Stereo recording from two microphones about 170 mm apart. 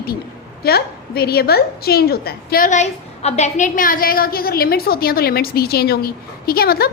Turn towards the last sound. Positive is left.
turn(degrees=65)  # may be behind; listen again after turning